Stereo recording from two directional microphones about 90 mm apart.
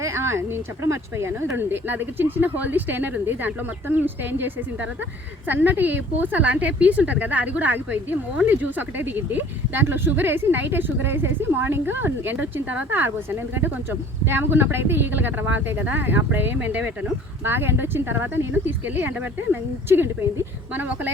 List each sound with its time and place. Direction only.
0.0 s a woman's voice: 30° right (ahead or behind)